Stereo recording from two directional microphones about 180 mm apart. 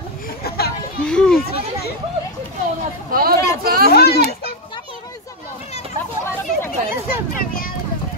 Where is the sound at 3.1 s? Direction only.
55° right (ahead or behind).